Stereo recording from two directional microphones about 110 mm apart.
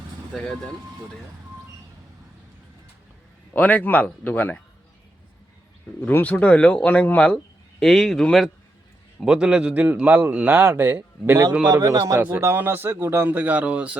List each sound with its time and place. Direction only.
0.3 s speech: 5° left (ahead or behind)
3.5 s speech: 15° left (ahead or behind)
6.0 s speech: 15° left (ahead or behind)
9.2 s speech: 5° right (ahead or behind)
11.7 s speech: 35° right (ahead or behind); by 14.0 s 10° right (ahead or behind)